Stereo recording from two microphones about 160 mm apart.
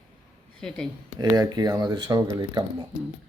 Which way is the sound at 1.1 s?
20° right (ahead or behind).